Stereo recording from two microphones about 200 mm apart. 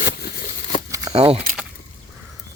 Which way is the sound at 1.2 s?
30° right (ahead or behind).